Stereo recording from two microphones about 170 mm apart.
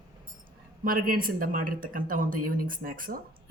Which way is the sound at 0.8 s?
55° right (ahead or behind).